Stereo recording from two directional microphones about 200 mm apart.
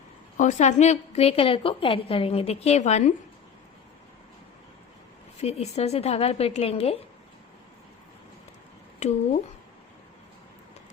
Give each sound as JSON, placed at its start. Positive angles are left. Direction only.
{"t": 0.3, "sound": "a woman's voice", "side_deg": 40}
{"t": 5.4, "sound": "a woman's voice", "side_deg": 35}